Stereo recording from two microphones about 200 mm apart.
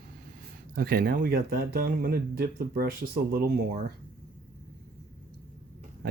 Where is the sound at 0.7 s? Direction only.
50° right (ahead or behind).